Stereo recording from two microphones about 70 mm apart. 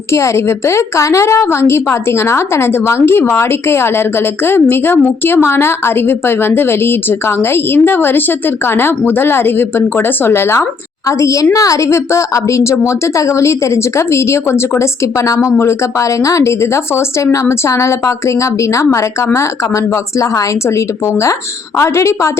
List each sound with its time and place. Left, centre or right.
0.1 s a woman's voice: left
11.2 s a woman's voice: left